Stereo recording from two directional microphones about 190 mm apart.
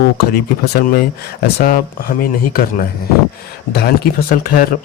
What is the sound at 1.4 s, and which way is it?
Speech, 50° left (ahead or behind).